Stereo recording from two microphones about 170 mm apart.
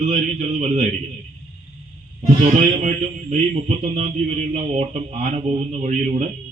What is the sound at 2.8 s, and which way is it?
Speech, 45° right (ahead or behind).